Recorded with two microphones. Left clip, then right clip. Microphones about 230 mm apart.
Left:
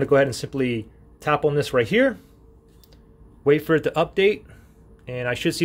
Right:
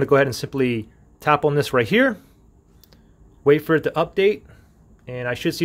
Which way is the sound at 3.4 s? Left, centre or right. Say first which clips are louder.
Right 2 dB; centre.